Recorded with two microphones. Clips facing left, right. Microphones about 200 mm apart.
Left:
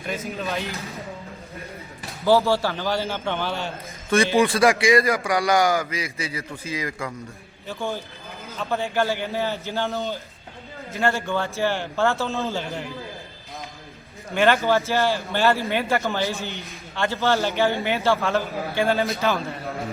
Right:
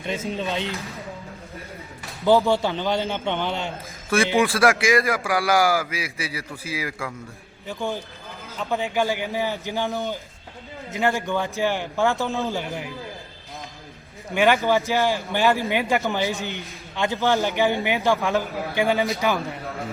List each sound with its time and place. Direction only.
0.0 s a man's voice: 25° right (ahead or behind)
2.2 s a man's voice: 15° right (ahead or behind)
4.4 s a man's voice: centre (ahead or behind)
7.7 s a man's voice: 15° right (ahead or behind)
14.3 s a man's voice: 15° right (ahead or behind)